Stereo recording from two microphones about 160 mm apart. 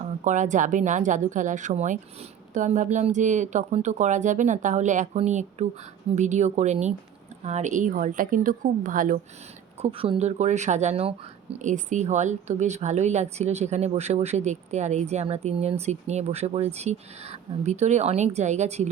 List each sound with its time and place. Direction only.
0.3 s a woman's voice: 50° right (ahead or behind)
9.8 s speech: 40° right (ahead or behind)